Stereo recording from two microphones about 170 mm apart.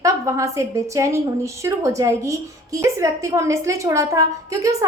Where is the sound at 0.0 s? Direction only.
20° right (ahead or behind).